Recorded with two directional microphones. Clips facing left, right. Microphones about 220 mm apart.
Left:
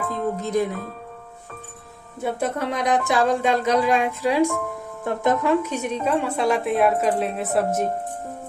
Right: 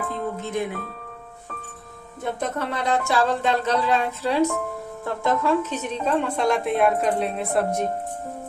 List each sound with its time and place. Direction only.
0.3 s speech: 40° left (ahead or behind)
2.2 s speech: 10° left (ahead or behind)